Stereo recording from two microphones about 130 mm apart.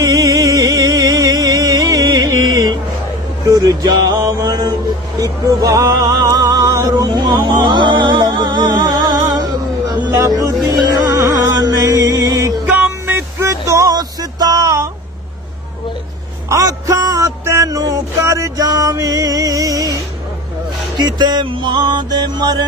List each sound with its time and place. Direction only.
0.0 s music: 30° right (ahead or behind)
12.6 s a sound: 10° right (ahead or behind)
16.5 s music: 25° right (ahead or behind)
21.0 s music: 35° right (ahead or behind)